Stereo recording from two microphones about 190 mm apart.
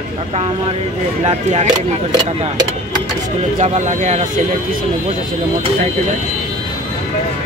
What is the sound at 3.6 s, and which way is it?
Speech, 35° right (ahead or behind).